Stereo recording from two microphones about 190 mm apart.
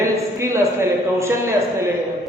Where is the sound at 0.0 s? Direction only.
15° right (ahead or behind).